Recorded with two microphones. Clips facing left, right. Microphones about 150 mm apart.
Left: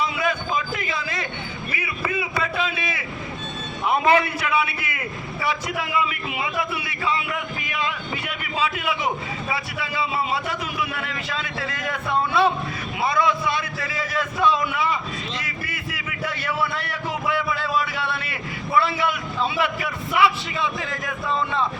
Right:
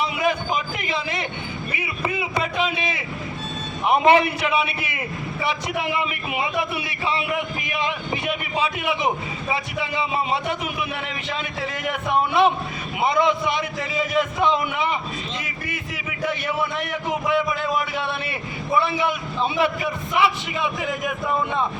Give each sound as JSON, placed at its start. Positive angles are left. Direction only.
{"t": 0.0, "sound": "a sound", "side_deg": -25}
{"t": 1.7, "sound": "a man's voice", "side_deg": -25}
{"t": 16.4, "sound": "a man's voice", "side_deg": -20}